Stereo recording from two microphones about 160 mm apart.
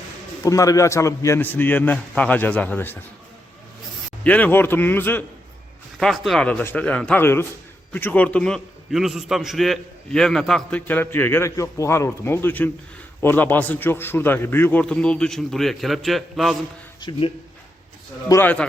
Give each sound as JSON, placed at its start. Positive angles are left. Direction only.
{"t": 0.4, "sound": "a man's voice", "side_deg": 20}
{"t": 4.2, "sound": "a man's voice", "side_deg": 10}
{"t": 6.0, "sound": "a man's voice", "side_deg": 0}
{"t": 17.0, "sound": "speech", "side_deg": 30}
{"t": 18.3, "sound": "a man's voice", "side_deg": 15}